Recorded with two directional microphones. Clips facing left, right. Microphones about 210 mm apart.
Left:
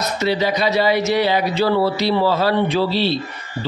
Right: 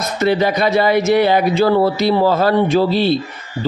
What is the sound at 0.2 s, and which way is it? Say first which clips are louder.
Speech: right 4 dB; 50° right (ahead or behind).